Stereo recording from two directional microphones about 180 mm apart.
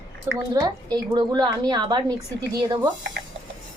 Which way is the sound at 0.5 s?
20° right (ahead or behind).